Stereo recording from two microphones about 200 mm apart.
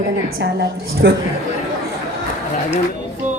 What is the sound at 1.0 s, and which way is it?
Speech, 65° right (ahead or behind).